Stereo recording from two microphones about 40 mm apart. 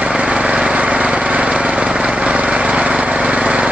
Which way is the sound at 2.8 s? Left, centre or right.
Right.